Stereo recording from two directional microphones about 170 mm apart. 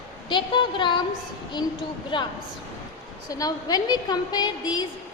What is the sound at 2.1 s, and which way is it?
A woman's voice, 30° left (ahead or behind).